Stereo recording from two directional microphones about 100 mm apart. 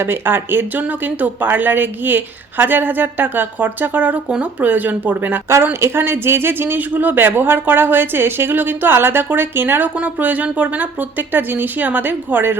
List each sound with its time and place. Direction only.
0.0 s speech: 20° right (ahead or behind)